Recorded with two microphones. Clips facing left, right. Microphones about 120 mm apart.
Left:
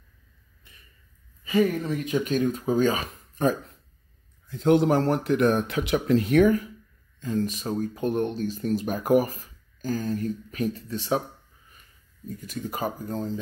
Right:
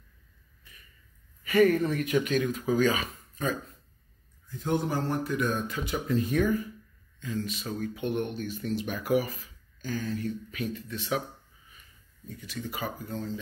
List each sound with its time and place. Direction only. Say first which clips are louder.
1.4 s speech: right 1 dB; 15° left (ahead or behind)
2.0 s speech: left 2 dB; 30° left (ahead or behind)
3.1 s a sound: left 7 dB; 55° left (ahead or behind)
4.5 s speech: left 9 dB; 70° left (ahead or behind)
7.2 s speech: left 6 dB; 45° left (ahead or behind)
12.3 s speech: left 4 dB; 45° left (ahead or behind)